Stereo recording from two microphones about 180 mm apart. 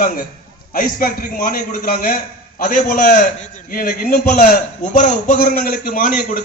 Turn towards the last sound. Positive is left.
turn(degrees=55)  # may be behind; listen again after turning